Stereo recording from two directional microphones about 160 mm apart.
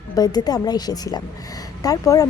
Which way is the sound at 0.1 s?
25° left (ahead or behind).